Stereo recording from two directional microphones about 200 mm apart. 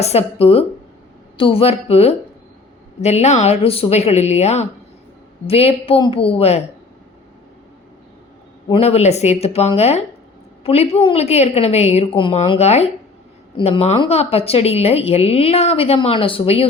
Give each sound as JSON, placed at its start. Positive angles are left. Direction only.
{"t": 0.0, "sound": "a woman's voice", "side_deg": 30}
{"t": 8.7, "sound": "a woman's voice", "side_deg": 30}